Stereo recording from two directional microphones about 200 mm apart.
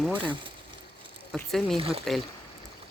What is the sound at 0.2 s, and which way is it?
Speech, 25° right (ahead or behind).